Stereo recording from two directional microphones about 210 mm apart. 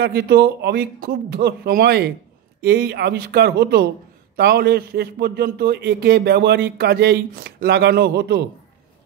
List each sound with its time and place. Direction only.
0.0 s a man's voice: 50° right (ahead or behind)